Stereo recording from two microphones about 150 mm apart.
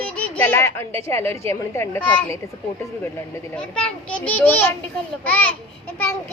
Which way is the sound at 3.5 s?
5° left (ahead or behind).